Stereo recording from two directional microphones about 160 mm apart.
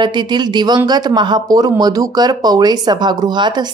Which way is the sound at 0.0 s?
30° right (ahead or behind).